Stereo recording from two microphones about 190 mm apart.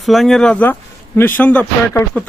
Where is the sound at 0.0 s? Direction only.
Centre (ahead or behind).